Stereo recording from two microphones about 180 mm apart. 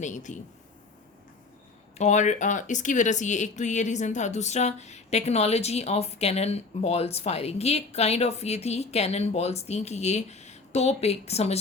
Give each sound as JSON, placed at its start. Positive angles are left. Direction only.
{"t": 0.0, "sound": "a man's voice", "side_deg": 40}
{"t": 2.0, "sound": "speech", "side_deg": 40}